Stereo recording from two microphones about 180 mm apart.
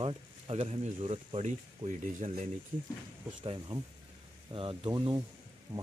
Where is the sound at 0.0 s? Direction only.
30° right (ahead or behind).